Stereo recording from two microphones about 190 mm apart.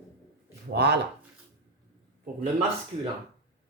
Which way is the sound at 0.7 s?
65° right (ahead or behind).